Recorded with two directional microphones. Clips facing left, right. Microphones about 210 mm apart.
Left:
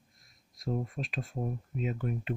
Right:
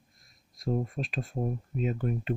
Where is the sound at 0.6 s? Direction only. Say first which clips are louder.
Right 4 dB; 35° right (ahead or behind).